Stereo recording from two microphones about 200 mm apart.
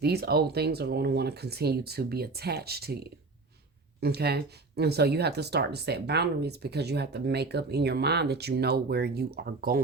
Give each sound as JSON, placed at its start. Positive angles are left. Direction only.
{"t": 0.0, "sound": "speech", "side_deg": -50}